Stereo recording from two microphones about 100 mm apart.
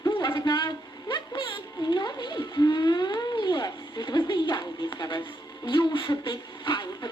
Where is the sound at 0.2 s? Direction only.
45° left (ahead or behind).